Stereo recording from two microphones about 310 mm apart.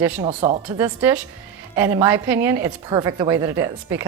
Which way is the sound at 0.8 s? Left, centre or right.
Centre.